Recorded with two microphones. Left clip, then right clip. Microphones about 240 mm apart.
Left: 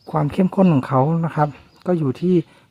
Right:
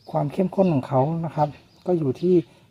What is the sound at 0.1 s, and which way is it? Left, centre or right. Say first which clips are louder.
Speech: left 3 dB; left.